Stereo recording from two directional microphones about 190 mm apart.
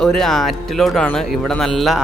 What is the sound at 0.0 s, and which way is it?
Speech, centre (ahead or behind).